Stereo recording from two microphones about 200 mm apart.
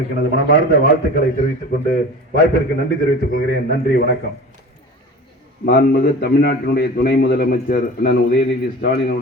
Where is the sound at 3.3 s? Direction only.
50° left (ahead or behind).